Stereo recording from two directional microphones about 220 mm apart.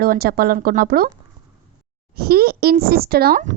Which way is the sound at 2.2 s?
45° right (ahead or behind).